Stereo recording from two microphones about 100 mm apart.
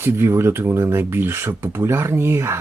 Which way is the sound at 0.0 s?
25° right (ahead or behind).